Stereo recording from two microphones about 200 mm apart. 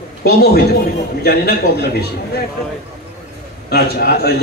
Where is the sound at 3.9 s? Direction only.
50° left (ahead or behind).